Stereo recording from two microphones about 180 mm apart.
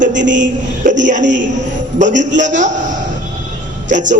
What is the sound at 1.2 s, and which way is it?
Speech, 85° right.